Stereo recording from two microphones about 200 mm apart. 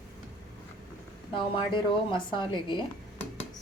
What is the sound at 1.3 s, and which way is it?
A woman's voice, 25° left (ahead or behind).